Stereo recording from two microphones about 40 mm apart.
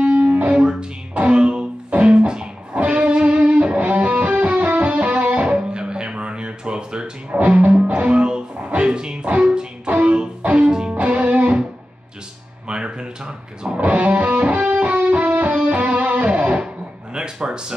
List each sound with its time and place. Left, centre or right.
0.0 s music: right
0.6 s music: right
7.3 s music: right
9.8 s music: right
10.5 s music: right
12.6 s a sound: right
13.7 s music: right
17.1 s a sound: right